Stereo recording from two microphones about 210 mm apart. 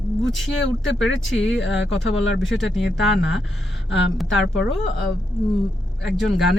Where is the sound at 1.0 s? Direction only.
65° left (ahead or behind).